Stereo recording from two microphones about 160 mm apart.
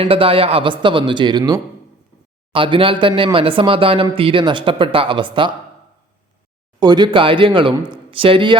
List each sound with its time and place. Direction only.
0.0 s speech: 35° right (ahead or behind)
6.7 s speech: 25° right (ahead or behind)